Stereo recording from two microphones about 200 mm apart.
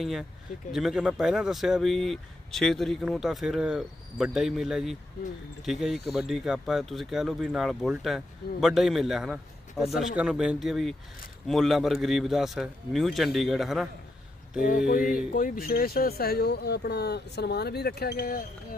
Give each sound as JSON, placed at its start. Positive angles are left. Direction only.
{"t": 0.0, "sound": "speech", "side_deg": 0}
{"t": 14.8, "sound": "speech", "side_deg": 45}